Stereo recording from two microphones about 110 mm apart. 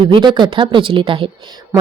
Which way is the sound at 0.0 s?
45° right (ahead or behind).